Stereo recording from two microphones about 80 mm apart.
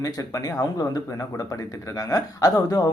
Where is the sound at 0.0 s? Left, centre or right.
Left.